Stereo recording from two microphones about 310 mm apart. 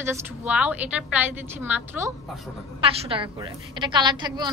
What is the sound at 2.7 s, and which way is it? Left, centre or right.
A woman's voice, centre.